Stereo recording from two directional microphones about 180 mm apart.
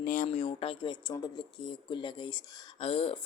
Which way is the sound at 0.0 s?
50° left (ahead or behind).